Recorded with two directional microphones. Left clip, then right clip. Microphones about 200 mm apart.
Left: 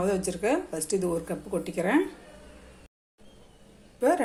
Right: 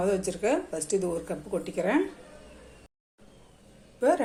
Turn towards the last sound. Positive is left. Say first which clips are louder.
# even
turn(degrees=5)  # may be behind; listen again after turning